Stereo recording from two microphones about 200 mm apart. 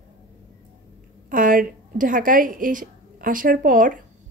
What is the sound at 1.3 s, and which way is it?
Speech, 40° right (ahead or behind).